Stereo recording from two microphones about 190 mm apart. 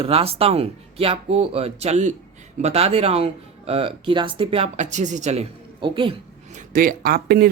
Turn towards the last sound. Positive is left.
turn(degrees=-55)  # may be behind; listen again after turning